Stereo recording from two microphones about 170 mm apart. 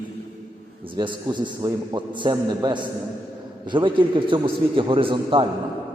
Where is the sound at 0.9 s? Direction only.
25° right (ahead or behind).